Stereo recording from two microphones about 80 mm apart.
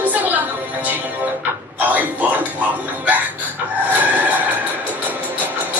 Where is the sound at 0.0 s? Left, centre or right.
Right.